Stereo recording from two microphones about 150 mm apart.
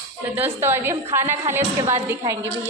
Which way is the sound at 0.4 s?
15° right (ahead or behind).